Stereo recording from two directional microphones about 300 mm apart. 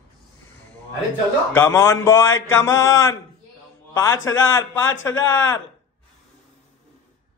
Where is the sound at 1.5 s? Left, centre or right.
Centre.